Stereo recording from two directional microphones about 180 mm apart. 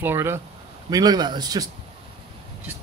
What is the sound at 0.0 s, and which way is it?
Speech, 15° right (ahead or behind).